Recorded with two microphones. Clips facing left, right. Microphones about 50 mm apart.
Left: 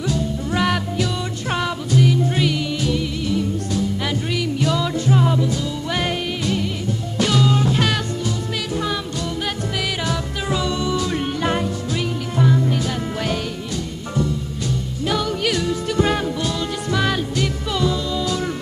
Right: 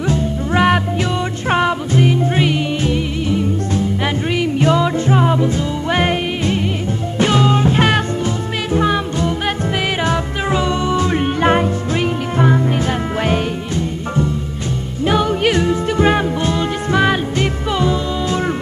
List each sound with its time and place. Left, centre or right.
0.1 s music: right
15.0 s music: right